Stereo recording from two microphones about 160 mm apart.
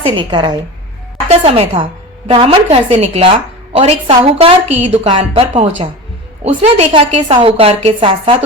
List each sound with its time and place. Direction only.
0.0 s a woman's voice: 30° right (ahead or behind)